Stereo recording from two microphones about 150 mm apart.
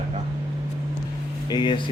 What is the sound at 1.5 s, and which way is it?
Speech, 30° left (ahead or behind).